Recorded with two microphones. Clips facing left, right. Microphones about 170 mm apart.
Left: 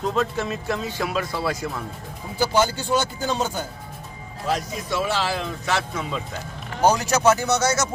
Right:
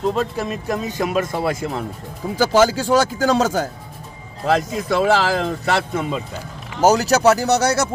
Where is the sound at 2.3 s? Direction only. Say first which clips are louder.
Right 6 dB; 90° right; by 6.1 s 60° right (ahead or behind).